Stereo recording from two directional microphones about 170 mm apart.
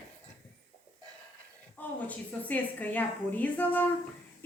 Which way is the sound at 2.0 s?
10° left (ahead or behind).